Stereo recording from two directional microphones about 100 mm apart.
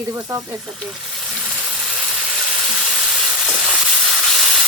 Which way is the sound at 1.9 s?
Centre (ahead or behind).